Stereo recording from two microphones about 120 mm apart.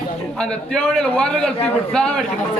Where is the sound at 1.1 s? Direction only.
10° left (ahead or behind).